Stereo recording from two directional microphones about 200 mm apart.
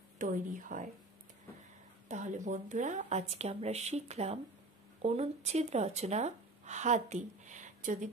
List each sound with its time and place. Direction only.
0.2 s speech: 40° right (ahead or behind)
2.0 s speech: 35° right (ahead or behind)